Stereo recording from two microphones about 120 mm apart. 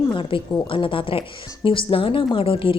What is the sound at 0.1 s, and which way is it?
A woman's voice, 45° left (ahead or behind).